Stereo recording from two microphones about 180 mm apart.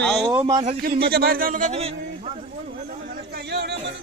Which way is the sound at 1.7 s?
35° right (ahead or behind).